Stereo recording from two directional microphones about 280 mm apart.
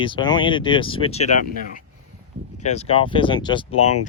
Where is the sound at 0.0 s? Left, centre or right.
Centre.